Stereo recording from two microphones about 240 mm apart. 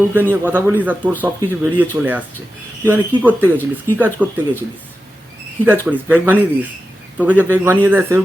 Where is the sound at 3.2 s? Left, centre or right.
Centre.